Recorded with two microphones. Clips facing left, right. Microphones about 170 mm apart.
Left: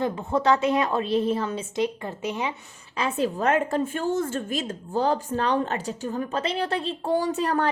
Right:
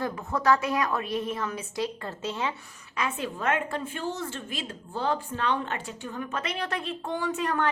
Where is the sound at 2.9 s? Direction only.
35° left (ahead or behind).